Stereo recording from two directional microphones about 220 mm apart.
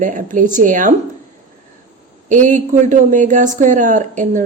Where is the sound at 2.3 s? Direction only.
35° right (ahead or behind).